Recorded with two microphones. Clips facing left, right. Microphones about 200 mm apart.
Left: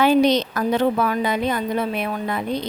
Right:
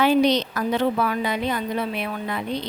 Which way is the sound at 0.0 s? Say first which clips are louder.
Left 2 dB; 45° left (ahead or behind).